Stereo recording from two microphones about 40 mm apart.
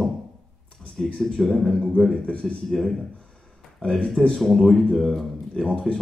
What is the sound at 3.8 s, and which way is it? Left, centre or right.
Speech, centre.